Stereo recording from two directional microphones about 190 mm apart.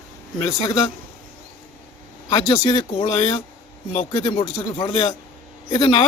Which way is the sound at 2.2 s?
25° left (ahead or behind).